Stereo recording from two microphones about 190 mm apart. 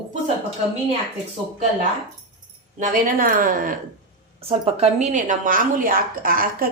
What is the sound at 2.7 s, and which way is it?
A woman's voice, 45° right (ahead or behind).